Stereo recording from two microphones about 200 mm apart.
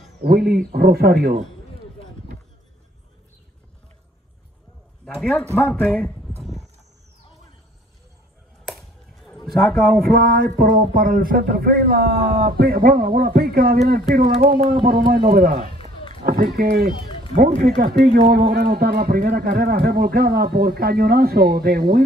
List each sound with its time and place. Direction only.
0.2 s speech: 50° right (ahead or behind)
5.0 s speech: centre (ahead or behind)
8.6 s chop: centre (ahead or behind)
9.8 s speech: 50° right (ahead or behind)